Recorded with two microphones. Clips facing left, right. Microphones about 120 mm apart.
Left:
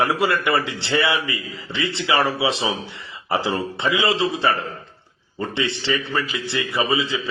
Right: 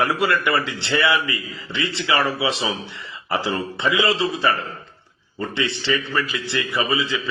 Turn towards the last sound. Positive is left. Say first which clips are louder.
# left 1 dB
turn(degrees=25)  # may be behind; listen again after turning